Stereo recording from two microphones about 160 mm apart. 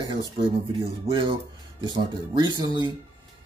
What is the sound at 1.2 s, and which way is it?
A man's voice, 30° right (ahead or behind).